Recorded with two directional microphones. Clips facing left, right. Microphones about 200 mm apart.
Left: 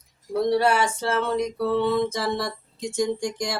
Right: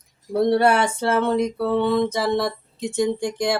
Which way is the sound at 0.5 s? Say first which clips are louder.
Right 2 dB; 55° right (ahead or behind).